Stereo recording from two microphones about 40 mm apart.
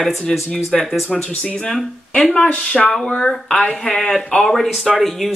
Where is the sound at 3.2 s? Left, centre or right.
Centre.